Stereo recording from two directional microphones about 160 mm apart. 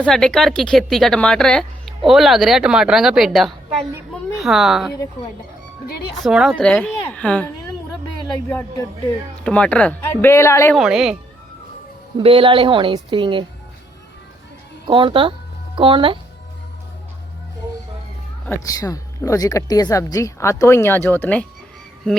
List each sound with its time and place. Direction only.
0.0 s speech: 5° left (ahead or behind)
6.1 s speech: centre (ahead or behind)
9.4 s speech: 5° left (ahead or behind)
10.8 s speech: 5° right (ahead or behind)
12.1 s a woman's voice: 30° right (ahead or behind)
14.8 s speech: 30° right (ahead or behind)
18.4 s speech: 20° left (ahead or behind)